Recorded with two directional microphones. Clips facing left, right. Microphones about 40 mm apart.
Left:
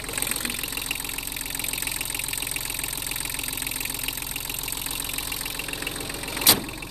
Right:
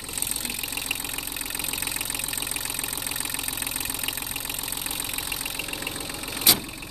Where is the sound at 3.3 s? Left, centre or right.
Centre.